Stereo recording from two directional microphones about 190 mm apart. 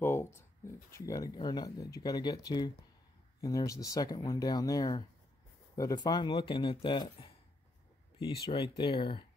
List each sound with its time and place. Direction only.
0.0 s speech: 10° left (ahead or behind); by 9.2 s 25° left (ahead or behind)